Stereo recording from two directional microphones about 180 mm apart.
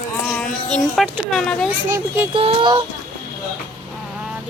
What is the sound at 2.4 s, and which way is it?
Speech, 30° right (ahead or behind).